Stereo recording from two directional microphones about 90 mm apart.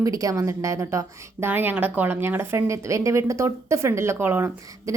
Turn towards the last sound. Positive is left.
turn(degrees=-25)  # may be behind; listen again after turning